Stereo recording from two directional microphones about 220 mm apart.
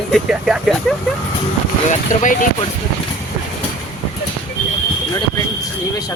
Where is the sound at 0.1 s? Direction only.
Centre (ahead or behind).